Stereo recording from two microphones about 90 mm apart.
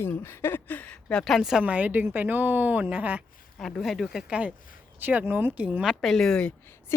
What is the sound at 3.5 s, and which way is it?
Speech, centre (ahead or behind).